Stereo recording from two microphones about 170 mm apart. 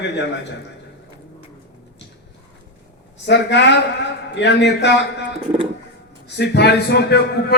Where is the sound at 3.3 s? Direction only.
90° left.